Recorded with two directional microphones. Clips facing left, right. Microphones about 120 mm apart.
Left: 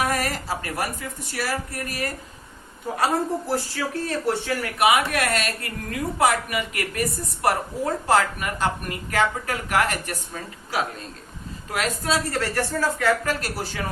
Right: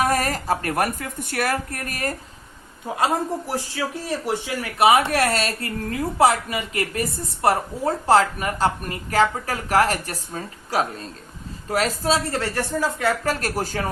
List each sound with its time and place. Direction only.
0.0 s speech: 40° right (ahead or behind)
3.0 s speech: 15° right (ahead or behind)
4.8 s a woman's voice: 30° right (ahead or behind)
12.3 s speech: 20° right (ahead or behind)
13.2 s speech: 45° right (ahead or behind)